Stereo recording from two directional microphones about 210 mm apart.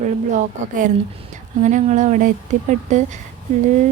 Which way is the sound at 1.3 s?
35° right (ahead or behind).